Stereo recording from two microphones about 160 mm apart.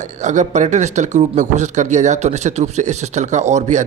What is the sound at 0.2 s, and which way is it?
Speech, 45° right (ahead or behind).